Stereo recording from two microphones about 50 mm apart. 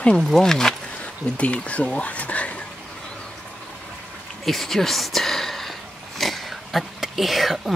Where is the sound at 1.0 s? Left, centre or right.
Left.